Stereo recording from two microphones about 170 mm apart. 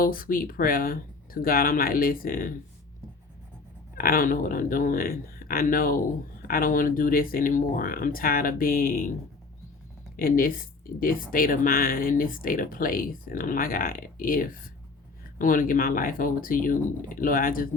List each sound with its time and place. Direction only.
0.0 s speech: 55° left (ahead or behind)
3.9 s speech: 55° left (ahead or behind)
10.2 s speech: 55° left (ahead or behind)